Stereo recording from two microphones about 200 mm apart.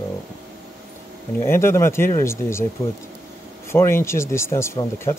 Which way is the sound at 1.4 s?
10° left (ahead or behind).